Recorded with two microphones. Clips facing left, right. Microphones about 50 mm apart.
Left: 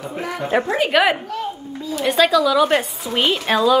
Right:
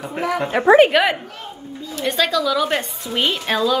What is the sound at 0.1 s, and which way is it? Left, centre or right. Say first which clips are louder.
Speech: right 6 dB; right.